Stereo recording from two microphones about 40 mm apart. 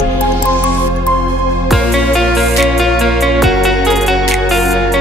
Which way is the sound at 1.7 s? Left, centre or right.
Centre.